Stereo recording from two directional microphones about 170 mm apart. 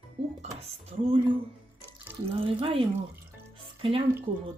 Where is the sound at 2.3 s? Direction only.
35° right (ahead or behind).